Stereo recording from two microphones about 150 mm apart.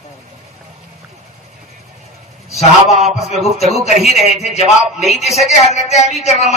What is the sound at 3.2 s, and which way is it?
A man's voice, 45° left (ahead or behind).